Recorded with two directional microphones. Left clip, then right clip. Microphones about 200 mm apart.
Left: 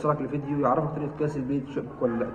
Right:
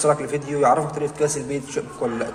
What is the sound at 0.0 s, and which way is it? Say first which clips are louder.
Speech: right 7 dB; 25° right (ahead or behind).